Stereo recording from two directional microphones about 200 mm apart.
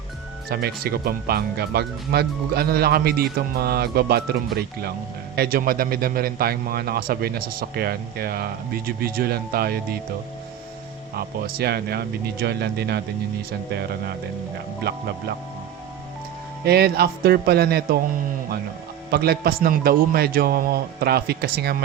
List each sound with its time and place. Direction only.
0.5 s a man's voice: 50° right (ahead or behind)
11.1 s a man's voice: 50° right (ahead or behind)
16.6 s a man's voice: 50° right (ahead or behind)
19.1 s a man's voice: 50° right (ahead or behind)